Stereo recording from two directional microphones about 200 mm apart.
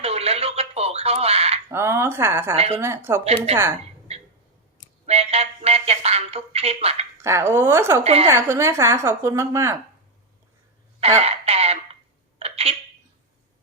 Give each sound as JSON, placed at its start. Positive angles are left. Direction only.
{"t": 0.0, "sound": "a sound", "side_deg": -30}
{"t": 1.7, "sound": "a woman's voice", "side_deg": -15}
{"t": 3.2, "sound": "speech", "side_deg": -30}
{"t": 5.0, "sound": "music", "side_deg": -30}
{"t": 7.2, "sound": "a woman's voice", "side_deg": -15}
{"t": 8.0, "sound": "speech", "side_deg": -30}
{"t": 8.3, "sound": "a woman's voice", "side_deg": -15}
{"t": 11.2, "sound": "a sound", "side_deg": -30}
{"t": 12.4, "sound": "telephone", "side_deg": -30}